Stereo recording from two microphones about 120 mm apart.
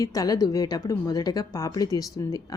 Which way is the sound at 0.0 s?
30° left (ahead or behind).